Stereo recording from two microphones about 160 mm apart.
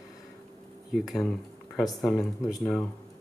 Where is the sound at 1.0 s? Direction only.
5° left (ahead or behind).